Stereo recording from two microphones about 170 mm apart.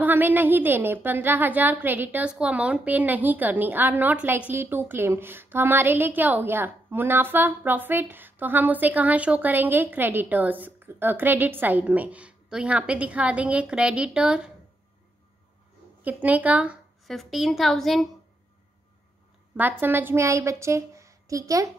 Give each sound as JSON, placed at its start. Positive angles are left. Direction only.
{"t": 0.0, "sound": "a woman's voice", "side_deg": -10}
{"t": 16.0, "sound": "a woman's voice", "side_deg": -10}
{"t": 19.8, "sound": "a woman's voice", "side_deg": -10}